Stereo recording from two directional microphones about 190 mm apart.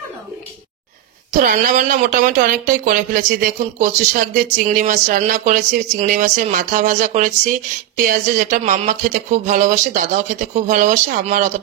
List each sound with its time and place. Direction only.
1.3 s speech: 45° right (ahead or behind)